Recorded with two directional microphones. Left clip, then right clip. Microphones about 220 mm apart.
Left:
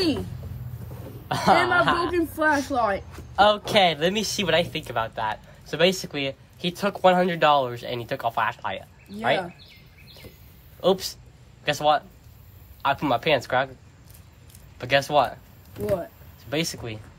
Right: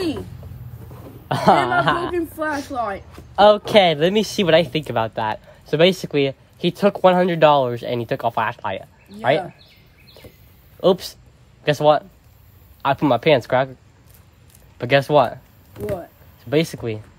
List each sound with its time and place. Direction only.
1.3 s speech: 40° right (ahead or behind)
2.1 s a man's voice: 30° left (ahead or behind)
3.3 s speech: 45° right (ahead or behind)
10.8 s speech: 45° right (ahead or behind)
14.8 s speech: 45° right (ahead or behind)
16.4 s speech: 45° right (ahead or behind)